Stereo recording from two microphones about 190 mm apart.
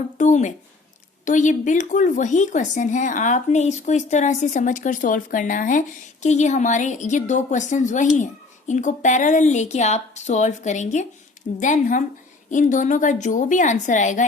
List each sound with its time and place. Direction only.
0.2 s speech: 40° left (ahead or behind)